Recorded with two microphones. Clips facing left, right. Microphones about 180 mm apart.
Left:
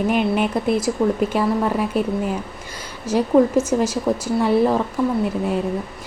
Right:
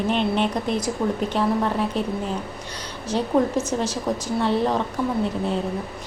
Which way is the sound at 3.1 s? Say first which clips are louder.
Left 5 dB; 10° left (ahead or behind).